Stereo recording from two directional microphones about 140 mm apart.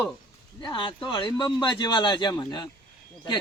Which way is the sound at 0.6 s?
35° left (ahead or behind).